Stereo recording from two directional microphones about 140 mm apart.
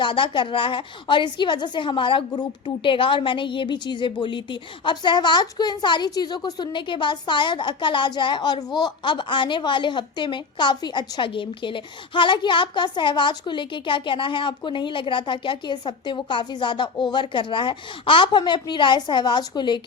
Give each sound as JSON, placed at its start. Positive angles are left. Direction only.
{"t": 0.0, "sound": "speech", "side_deg": 35}